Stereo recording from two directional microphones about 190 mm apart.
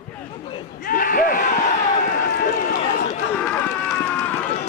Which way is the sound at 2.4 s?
45° left (ahead or behind).